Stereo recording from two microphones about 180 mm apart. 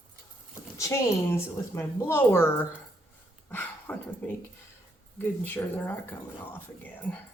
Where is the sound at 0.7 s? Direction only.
15° left (ahead or behind).